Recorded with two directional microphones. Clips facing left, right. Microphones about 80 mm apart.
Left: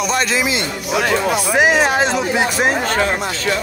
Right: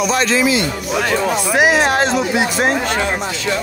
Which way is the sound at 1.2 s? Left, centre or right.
Centre.